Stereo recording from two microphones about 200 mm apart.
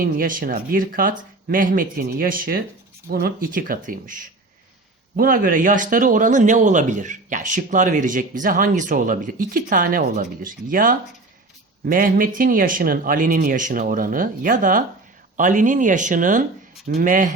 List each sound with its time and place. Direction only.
0.0 s speech: 45° right (ahead or behind)